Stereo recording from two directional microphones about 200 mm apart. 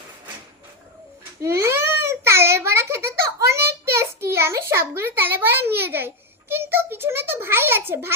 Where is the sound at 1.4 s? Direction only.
15° right (ahead or behind).